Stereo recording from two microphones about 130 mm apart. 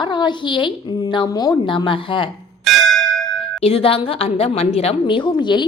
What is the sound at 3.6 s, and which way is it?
A woman's voice, 50° left (ahead or behind).